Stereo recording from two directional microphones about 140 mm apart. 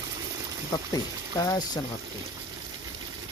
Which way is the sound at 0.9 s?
25° left (ahead or behind).